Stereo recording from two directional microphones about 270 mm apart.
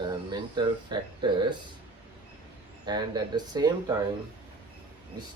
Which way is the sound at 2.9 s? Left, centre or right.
Centre.